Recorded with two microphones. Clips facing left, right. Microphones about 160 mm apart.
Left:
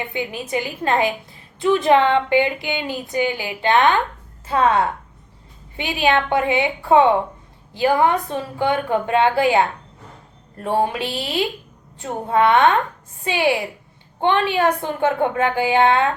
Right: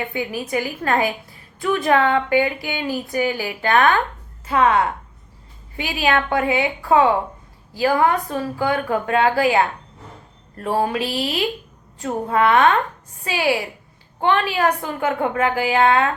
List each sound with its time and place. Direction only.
0.1 s speech: 25° left (ahead or behind)